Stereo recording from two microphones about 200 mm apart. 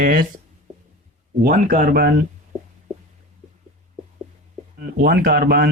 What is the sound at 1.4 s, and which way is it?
Speech, 45° right (ahead or behind).